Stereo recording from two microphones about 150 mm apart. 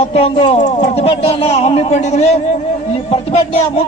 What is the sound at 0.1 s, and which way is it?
A man's voice, 40° left (ahead or behind).